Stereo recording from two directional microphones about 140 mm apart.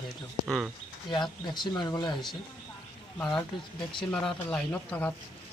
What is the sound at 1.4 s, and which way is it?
Speech, 30° left (ahead or behind).